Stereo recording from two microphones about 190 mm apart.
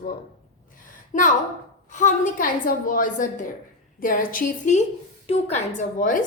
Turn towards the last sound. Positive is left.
turn(degrees=45)  # may be behind; listen again after turning